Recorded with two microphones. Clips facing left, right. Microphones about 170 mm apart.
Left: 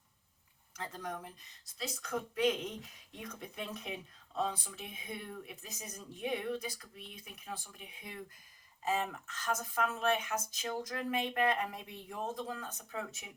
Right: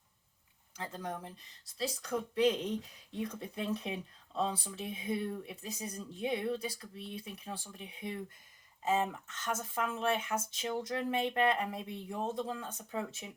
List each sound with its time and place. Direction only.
0.8 s speech: 30° right (ahead or behind)